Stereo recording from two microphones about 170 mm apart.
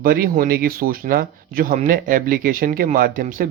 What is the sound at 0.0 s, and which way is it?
Speech, 60° right (ahead or behind).